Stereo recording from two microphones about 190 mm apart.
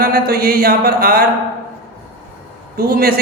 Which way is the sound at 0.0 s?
50° right (ahead or behind).